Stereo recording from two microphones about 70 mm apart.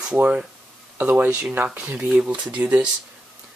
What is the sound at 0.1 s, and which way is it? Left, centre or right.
Speech, right.